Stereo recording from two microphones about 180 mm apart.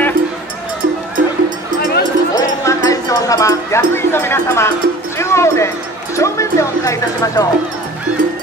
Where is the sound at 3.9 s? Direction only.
15° left (ahead or behind).